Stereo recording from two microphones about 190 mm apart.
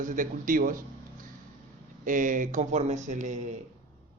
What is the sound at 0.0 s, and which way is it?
A man's voice, 45° right (ahead or behind).